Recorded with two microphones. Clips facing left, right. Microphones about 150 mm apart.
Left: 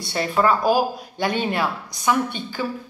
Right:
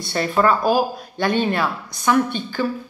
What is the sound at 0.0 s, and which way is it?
Speech, 10° left (ahead or behind).